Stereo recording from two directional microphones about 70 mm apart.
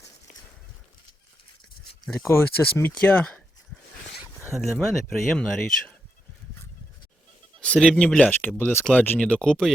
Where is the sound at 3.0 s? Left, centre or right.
Left.